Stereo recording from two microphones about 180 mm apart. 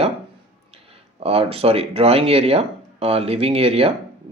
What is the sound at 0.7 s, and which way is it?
Speech, 35° right (ahead or behind).